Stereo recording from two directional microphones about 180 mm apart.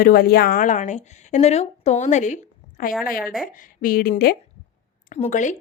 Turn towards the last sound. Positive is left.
turn(degrees=40)  # may be behind; listen again after turning